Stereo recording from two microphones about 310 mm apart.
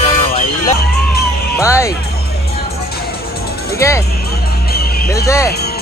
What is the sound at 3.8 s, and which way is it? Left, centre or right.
Speech, centre.